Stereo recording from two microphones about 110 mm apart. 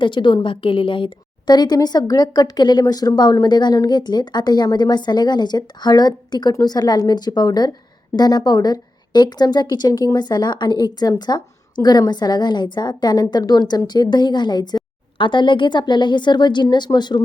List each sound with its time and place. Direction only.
0.0 s a woman's voice: 45° left (ahead or behind)